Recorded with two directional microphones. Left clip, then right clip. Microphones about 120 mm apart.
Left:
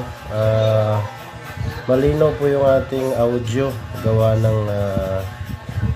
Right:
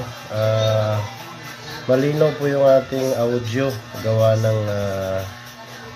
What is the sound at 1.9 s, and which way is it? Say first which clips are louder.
Speech: left 1 dB; 5° left (ahead or behind).